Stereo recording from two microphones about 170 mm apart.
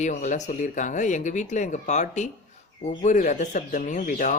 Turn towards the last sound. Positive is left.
turn(degrees=50)  # may be behind; listen again after turning